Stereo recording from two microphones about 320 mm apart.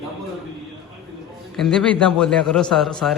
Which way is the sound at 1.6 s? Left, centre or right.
Centre.